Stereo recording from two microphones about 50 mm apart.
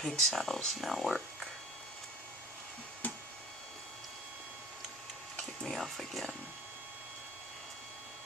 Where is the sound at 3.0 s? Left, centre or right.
Left.